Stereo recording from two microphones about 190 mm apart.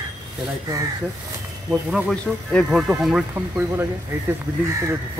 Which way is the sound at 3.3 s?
15° right (ahead or behind).